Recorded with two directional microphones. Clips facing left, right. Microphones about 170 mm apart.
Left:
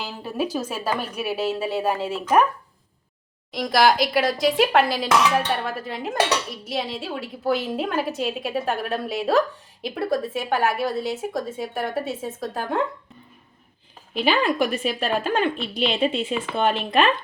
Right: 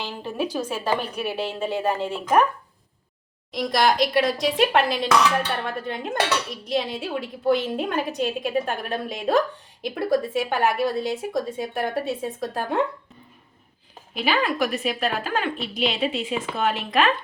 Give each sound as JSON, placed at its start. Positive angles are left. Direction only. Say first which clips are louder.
{"t": 0.0, "sound": "a woman's voice", "louder": "left 1 dB", "side_deg": 5}
{"t": 3.5, "sound": "speech", "louder": "left 2 dB", "side_deg": 0}
{"t": 14.1, "sound": "a woman's voice", "louder": "left 3 dB", "side_deg": 30}